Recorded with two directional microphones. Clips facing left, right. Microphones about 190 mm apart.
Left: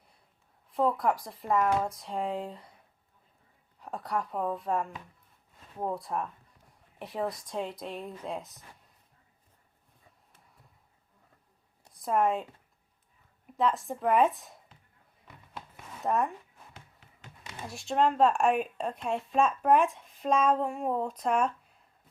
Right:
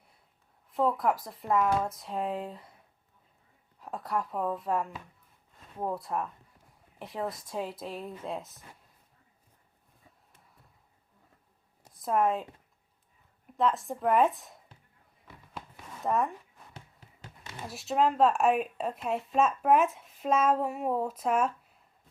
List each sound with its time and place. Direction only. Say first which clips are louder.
0.7 s speech: even; centre (ahead or behind)
3.8 s speech: even; centre (ahead or behind)
11.9 s speech: even; centre (ahead or behind)
13.6 s speech: even; centre (ahead or behind)
16.0 s speech: even; centre (ahead or behind)
17.7 s speech: even; 5° right (ahead or behind)